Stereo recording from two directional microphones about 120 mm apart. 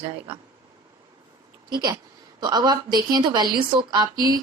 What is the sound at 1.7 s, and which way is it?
A woman's voice, 35° right (ahead or behind).